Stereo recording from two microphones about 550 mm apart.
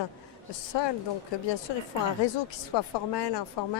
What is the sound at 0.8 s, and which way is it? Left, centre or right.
Speech, left.